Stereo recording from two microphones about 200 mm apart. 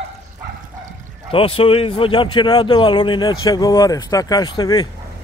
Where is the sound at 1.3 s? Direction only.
25° left (ahead or behind).